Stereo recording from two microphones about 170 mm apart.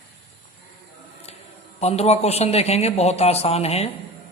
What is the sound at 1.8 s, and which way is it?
Speech, 40° left (ahead or behind).